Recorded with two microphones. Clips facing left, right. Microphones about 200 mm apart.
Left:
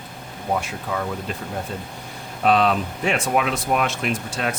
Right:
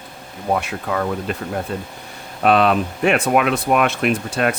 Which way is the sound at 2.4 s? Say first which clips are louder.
Right 3 dB; 60° right (ahead or behind).